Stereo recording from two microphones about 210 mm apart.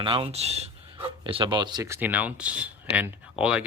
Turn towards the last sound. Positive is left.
turn(degrees=-5)  # may be behind; listen again after turning